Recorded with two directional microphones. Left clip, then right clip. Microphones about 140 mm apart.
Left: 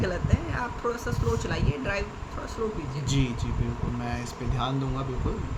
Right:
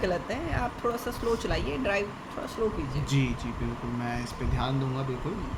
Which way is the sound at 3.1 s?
30° left (ahead or behind).